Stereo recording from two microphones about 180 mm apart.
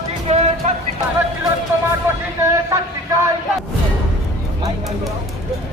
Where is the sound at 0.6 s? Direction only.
40° right (ahead or behind).